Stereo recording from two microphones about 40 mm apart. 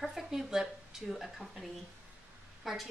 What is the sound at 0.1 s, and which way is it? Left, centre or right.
Speech, centre.